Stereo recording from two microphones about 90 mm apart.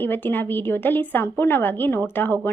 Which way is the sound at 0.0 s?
25° left (ahead or behind).